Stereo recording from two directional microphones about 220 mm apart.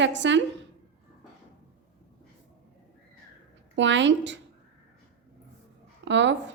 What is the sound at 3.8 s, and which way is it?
Speech, 55° right (ahead or behind).